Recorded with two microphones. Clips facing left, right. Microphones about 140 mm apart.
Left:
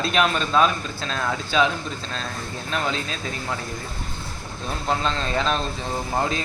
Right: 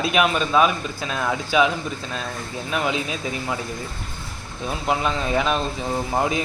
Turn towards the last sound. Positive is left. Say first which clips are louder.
# right 2 dB
turn(degrees=-15)  # may be behind; listen again after turning